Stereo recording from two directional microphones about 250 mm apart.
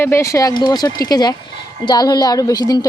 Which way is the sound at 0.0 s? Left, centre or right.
Centre.